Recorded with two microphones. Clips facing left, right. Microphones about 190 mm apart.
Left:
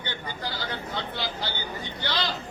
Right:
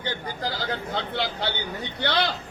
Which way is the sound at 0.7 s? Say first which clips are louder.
Right 4 dB; 60° right (ahead or behind).